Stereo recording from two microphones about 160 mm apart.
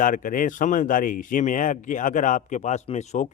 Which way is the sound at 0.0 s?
55° left (ahead or behind).